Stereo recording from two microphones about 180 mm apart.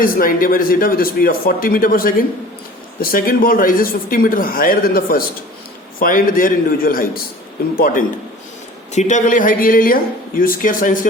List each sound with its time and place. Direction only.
0.0 s a man's voice: 50° left (ahead or behind)
8.9 s speech: 40° left (ahead or behind)